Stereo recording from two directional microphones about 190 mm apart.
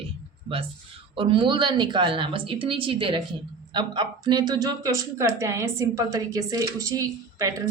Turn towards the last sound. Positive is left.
turn(degrees=-20)  # may be behind; listen again after turning